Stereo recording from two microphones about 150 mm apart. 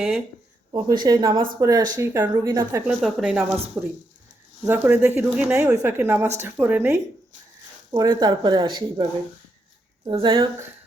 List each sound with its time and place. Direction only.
0.7 s a woman's voice: 25° right (ahead or behind)
2.3 s speech: 25° right (ahead or behind)
2.8 s a woman's voice: 5° right (ahead or behind)
7.9 s speech: 30° right (ahead or behind)
10.1 s a woman's voice: 35° right (ahead or behind)